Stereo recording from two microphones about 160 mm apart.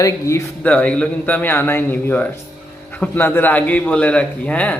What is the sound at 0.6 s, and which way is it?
A man's voice, 10° left (ahead or behind).